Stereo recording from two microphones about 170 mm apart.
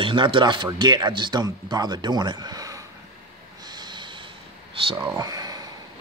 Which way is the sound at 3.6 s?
25° right (ahead or behind).